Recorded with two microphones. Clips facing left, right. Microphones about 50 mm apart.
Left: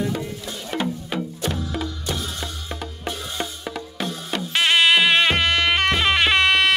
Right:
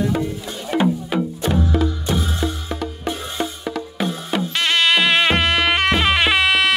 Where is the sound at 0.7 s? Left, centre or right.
Centre.